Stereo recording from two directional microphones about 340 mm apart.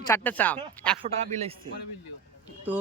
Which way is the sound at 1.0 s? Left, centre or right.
Centre.